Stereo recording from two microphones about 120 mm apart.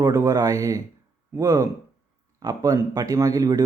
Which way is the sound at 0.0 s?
25° right (ahead or behind).